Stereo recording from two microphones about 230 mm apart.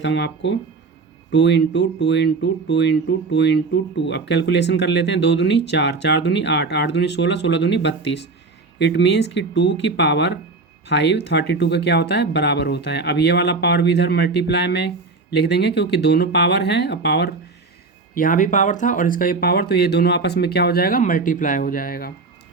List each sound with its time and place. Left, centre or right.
0.0 s speech: left
18.1 s speech: left